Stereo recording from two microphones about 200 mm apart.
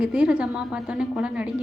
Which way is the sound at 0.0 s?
5° right (ahead or behind).